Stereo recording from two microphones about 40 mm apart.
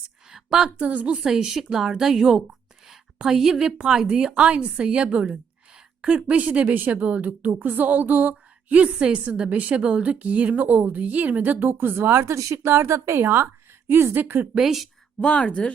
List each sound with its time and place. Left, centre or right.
0.3 s a sound: centre
0.8 s speech: right
1.2 s a woman's voice: centre
3.8 s speech: centre
6.2 s speech: right
7.6 s speech: right
10.6 s speech: right
12.6 s a woman's voice: right
14.2 s speech: right
14.6 s speech: centre
15.2 s speech: left